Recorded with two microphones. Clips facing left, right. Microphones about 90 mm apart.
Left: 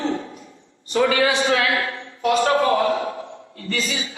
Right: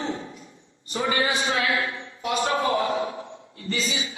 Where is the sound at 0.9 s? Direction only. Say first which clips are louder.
Left 6 dB; 80° left; by 4.2 s 55° left (ahead or behind).